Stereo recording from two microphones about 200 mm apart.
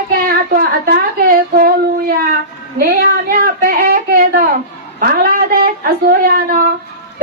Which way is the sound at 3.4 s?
45° right (ahead or behind).